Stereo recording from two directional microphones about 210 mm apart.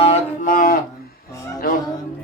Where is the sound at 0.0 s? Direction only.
35° left (ahead or behind).